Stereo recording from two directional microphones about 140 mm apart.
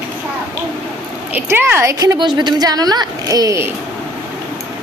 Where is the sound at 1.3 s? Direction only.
15° right (ahead or behind).